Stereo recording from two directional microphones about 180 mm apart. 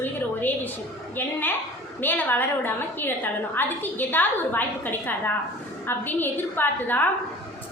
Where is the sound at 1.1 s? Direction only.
10° left (ahead or behind).